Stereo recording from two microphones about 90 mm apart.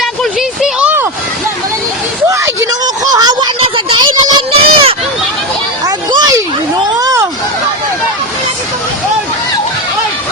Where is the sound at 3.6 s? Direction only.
70° right (ahead or behind).